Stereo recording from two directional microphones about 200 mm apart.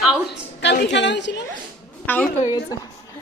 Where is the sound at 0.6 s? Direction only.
60° left (ahead or behind).